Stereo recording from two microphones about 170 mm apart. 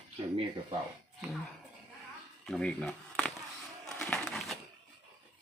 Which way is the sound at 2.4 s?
5° left (ahead or behind).